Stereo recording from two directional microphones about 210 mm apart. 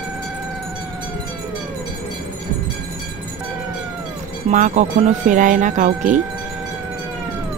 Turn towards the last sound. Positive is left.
turn(degrees=-35)  # may be behind; listen again after turning